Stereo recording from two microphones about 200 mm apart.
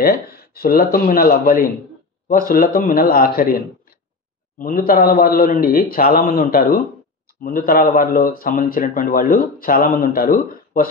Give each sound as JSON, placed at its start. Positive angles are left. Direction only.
{"t": 0.0, "sound": "a man's voice", "side_deg": 50}